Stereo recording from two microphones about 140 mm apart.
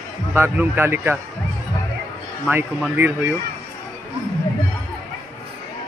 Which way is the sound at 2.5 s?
10° right (ahead or behind).